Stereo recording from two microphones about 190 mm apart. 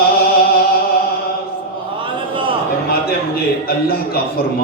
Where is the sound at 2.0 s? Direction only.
25° right (ahead or behind).